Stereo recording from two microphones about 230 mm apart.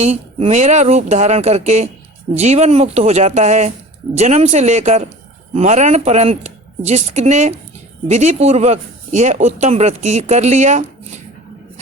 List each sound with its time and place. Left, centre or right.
0.0 s a man's voice: right